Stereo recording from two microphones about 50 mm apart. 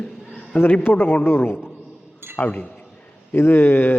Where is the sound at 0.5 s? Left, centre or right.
Left.